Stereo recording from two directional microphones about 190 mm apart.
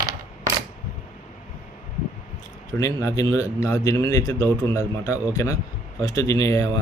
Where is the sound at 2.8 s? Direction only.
15° left (ahead or behind).